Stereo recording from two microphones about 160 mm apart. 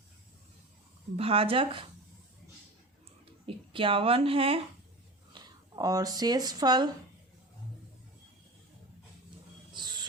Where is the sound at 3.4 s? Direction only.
35° right (ahead or behind).